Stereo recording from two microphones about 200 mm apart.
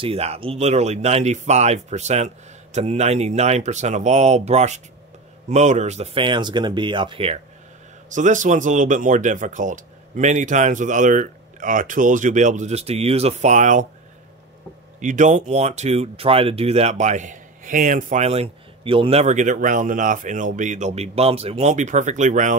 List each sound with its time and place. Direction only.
0.0 s speech: 30° right (ahead or behind)
8.1 s speech: 40° right (ahead or behind)
15.0 s speech: 40° right (ahead or behind)